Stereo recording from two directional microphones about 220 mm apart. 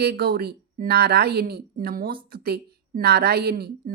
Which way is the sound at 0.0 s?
45° right (ahead or behind).